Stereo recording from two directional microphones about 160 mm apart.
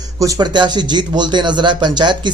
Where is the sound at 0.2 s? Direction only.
25° right (ahead or behind).